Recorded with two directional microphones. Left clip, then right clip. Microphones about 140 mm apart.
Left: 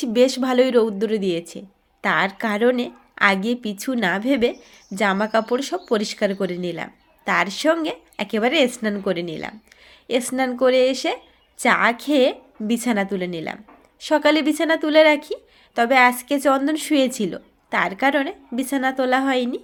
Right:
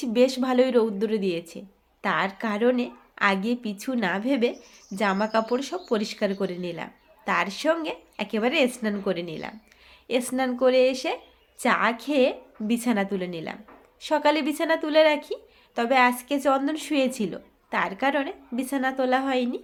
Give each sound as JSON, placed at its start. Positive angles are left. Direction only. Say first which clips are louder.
{"t": 0.0, "sound": "a woman's voice", "louder": "left 4 dB", "side_deg": 40}